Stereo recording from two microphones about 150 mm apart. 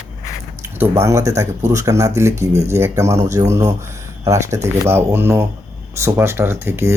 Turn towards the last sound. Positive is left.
turn(degrees=-15)  # may be behind; listen again after turning